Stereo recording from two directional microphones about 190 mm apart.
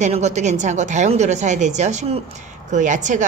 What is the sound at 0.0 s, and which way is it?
A woman's voice, 35° right (ahead or behind).